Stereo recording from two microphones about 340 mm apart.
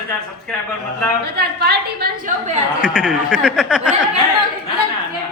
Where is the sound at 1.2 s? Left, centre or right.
Right.